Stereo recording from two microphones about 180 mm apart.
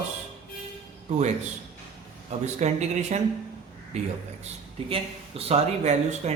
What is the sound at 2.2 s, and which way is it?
Speech, 40° right (ahead or behind).